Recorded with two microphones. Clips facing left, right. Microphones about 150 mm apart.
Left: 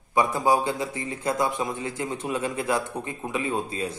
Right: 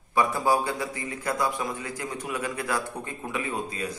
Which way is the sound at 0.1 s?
20° left (ahead or behind).